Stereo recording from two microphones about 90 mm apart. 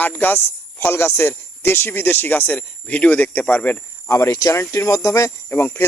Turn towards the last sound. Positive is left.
turn(degrees=25)  # may be behind; listen again after turning